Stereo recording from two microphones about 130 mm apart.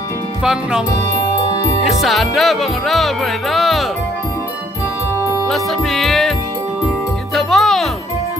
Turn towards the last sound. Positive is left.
turn(degrees=0)  # may be behind; listen again after turning